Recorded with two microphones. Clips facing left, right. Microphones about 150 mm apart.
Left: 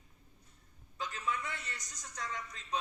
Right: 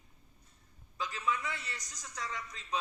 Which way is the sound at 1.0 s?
50° left (ahead or behind).